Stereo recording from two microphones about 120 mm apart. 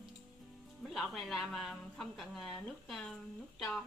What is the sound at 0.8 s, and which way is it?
A woman's voice, centre (ahead or behind).